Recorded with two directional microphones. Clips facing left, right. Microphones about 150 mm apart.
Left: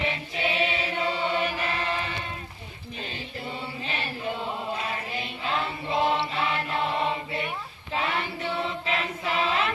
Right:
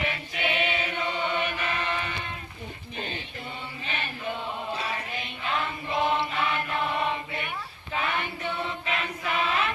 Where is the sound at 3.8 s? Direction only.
35° left (ahead or behind).